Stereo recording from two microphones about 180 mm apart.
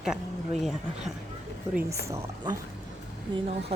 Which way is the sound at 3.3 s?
35° right (ahead or behind).